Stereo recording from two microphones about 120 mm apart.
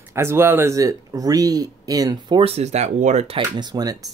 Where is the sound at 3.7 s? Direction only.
30° right (ahead or behind).